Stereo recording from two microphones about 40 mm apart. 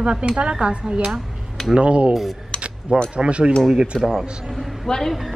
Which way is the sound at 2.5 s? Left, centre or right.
Right.